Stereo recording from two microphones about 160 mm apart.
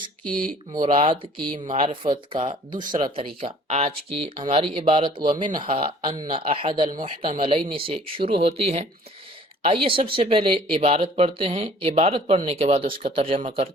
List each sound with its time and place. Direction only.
0.3 s speech: 5° left (ahead or behind)
1.0 s speech: 30° right (ahead or behind)
7.3 s speech: 50° right (ahead or behind)
7.5 s speech: 35° right (ahead or behind)